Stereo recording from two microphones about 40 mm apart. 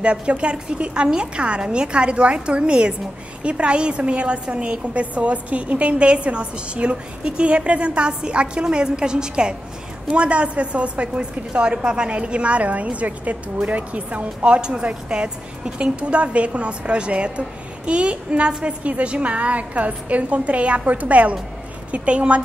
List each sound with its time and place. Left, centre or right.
0.0 s a woman's voice: right